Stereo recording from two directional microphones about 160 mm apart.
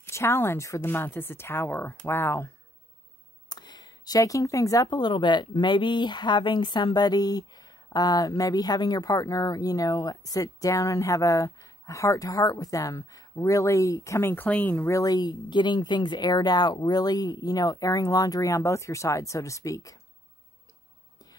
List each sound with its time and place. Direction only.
0.0 s speech: 15° left (ahead or behind)
3.4 s speech: 25° left (ahead or behind)